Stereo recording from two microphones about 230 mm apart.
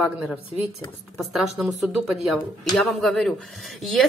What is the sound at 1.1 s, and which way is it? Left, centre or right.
A woman's voice, centre.